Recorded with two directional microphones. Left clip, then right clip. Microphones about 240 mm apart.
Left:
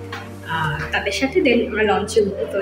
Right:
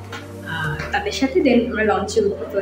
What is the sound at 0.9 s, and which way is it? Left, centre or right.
A woman's voice, centre.